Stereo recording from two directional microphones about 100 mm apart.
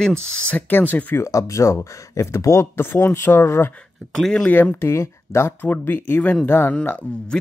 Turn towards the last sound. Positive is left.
turn(degrees=15)  # may be behind; listen again after turning